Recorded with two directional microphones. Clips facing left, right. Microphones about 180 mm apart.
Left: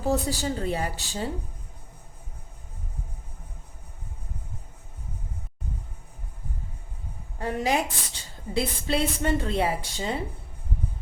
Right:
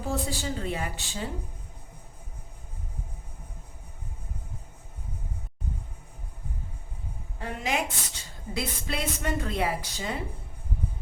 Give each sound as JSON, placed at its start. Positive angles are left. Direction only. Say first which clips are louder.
{"t": 0.1, "sound": "speech", "louder": "left 5 dB", "side_deg": 35}
{"t": 7.4, "sound": "a woman's voice", "louder": "left 4 dB", "side_deg": 35}